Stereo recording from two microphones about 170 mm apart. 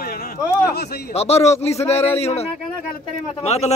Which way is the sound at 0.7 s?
70° left (ahead or behind).